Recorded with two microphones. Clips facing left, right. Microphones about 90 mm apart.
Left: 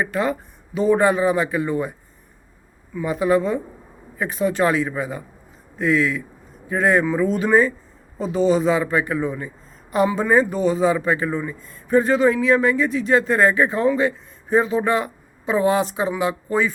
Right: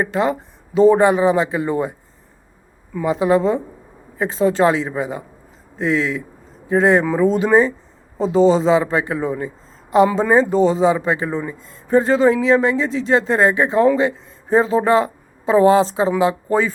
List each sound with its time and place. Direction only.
0.0 s speech: 25° right (ahead or behind)
3.1 s speech: 25° right (ahead or behind)
7.0 s a man's voice: 35° right (ahead or behind)